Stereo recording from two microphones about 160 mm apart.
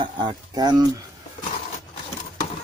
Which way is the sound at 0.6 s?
25° right (ahead or behind).